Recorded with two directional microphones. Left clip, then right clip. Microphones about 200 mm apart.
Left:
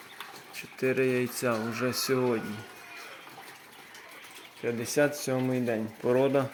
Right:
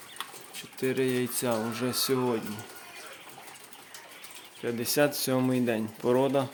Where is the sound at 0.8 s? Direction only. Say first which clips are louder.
Left 1 dB; 15° right (ahead or behind).